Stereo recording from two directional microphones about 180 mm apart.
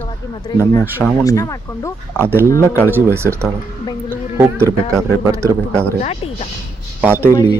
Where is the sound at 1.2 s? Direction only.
20° left (ahead or behind).